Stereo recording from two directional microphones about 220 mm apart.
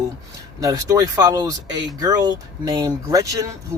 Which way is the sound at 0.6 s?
15° right (ahead or behind).